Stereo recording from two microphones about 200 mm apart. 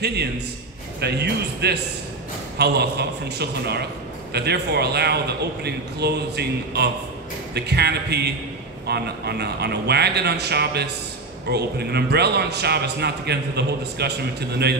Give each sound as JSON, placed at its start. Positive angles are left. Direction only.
{"t": 0.0, "sound": "a man's voice", "side_deg": -55}